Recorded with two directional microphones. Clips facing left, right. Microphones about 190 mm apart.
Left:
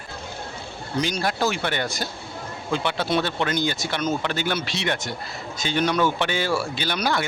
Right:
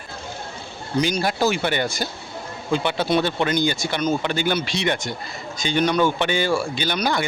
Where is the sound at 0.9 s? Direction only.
Centre (ahead or behind).